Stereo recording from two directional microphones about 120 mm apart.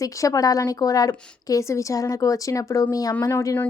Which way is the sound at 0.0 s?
30° left (ahead or behind).